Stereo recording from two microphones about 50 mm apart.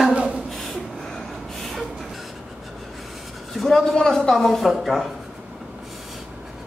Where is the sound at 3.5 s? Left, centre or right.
Centre.